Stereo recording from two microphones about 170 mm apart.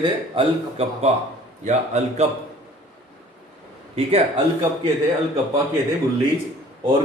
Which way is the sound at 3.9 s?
35° right (ahead or behind).